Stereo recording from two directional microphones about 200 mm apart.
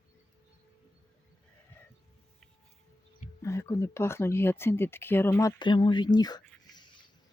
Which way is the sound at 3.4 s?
15° left (ahead or behind).